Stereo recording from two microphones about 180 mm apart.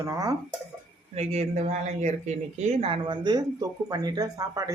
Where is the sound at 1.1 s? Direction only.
35° right (ahead or behind).